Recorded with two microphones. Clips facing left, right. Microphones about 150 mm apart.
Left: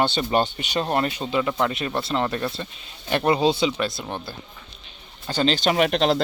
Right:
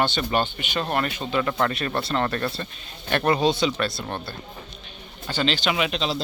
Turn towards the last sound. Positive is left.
turn(degrees=60)  # may be behind; listen again after turning